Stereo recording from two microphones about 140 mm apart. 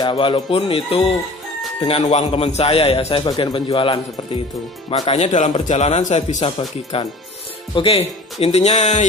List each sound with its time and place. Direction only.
0.0 s a man's voice: 35° left (ahead or behind)
5.1 s a man's voice: 55° left (ahead or behind)
6.4 s a man's voice: 45° left (ahead or behind)